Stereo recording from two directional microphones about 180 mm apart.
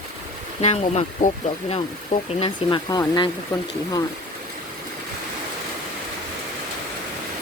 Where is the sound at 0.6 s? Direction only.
35° left (ahead or behind).